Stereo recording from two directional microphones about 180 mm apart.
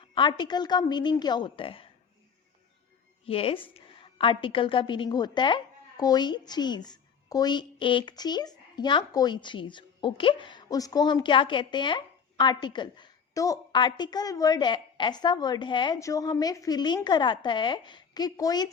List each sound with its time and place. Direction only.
0.0 s a woman's voice: 25° left (ahead or behind)
3.2 s a woman's voice: 30° left (ahead or behind)